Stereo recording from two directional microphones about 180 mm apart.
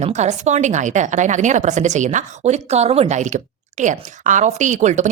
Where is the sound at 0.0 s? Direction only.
40° right (ahead or behind).